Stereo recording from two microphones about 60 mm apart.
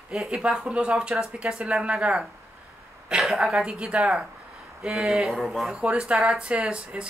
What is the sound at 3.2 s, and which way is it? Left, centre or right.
Speech, centre.